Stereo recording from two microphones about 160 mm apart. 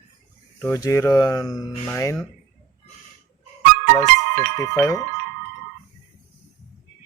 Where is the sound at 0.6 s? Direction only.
20° left (ahead or behind).